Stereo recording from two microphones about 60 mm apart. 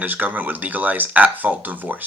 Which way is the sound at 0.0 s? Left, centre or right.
Right.